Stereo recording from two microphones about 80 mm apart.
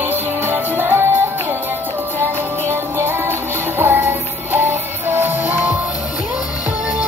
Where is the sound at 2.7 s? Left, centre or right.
Right.